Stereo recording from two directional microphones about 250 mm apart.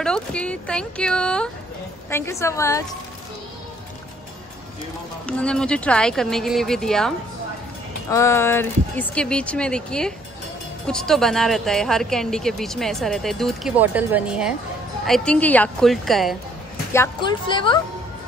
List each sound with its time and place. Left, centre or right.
0.0 s a woman's voice: centre
5.2 s speech: centre
16.9 s speech: centre